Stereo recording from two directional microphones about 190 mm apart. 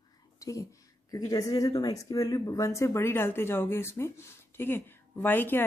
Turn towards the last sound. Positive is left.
turn(degrees=10)  # may be behind; listen again after turning